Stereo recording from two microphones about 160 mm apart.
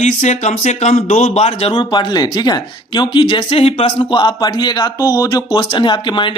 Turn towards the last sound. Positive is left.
turn(degrees=30)  # may be behind; listen again after turning